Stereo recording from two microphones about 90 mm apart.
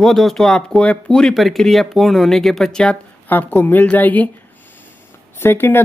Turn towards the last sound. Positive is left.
turn(degrees=25)  # may be behind; listen again after turning